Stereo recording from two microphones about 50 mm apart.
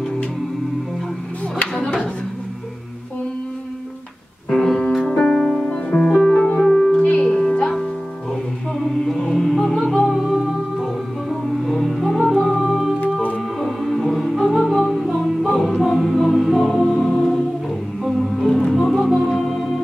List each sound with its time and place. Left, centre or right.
4.5 s music: centre
7.2 s music: centre
9.3 s music: centre
18.5 s music: centre
19.2 s organ: centre